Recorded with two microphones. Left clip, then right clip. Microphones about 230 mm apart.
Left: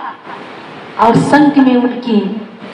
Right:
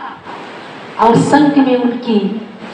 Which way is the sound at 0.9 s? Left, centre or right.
Left.